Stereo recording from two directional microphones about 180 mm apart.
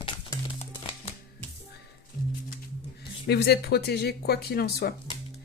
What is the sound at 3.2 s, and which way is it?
Speech, 60° left (ahead or behind).